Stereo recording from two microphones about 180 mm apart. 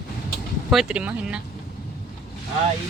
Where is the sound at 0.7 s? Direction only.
5° right (ahead or behind).